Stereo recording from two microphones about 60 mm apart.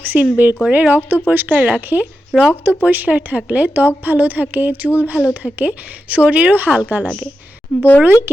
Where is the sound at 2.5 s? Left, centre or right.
Right.